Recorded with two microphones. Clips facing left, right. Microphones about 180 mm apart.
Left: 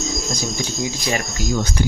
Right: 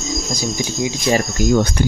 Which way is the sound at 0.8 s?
20° right (ahead or behind).